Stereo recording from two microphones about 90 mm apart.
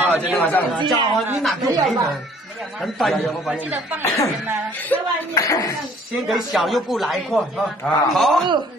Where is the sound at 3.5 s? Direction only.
15° right (ahead or behind).